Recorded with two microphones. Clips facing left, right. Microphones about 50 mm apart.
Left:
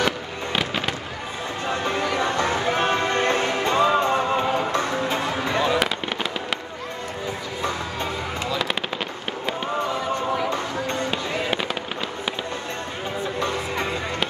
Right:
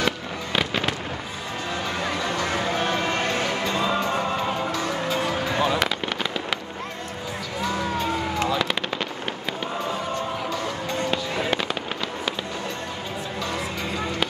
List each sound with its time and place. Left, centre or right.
0.5 s fireworks: centre
1.7 s music: left
5.8 s fireworks: centre
8.5 s machine gun: centre
11.1 s music: centre